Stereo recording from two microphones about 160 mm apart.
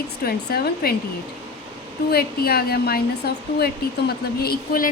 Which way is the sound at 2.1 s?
75° left (ahead or behind).